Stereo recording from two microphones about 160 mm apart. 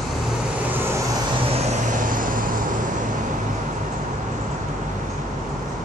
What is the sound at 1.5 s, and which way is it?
Vehicle, 50° right (ahead or behind).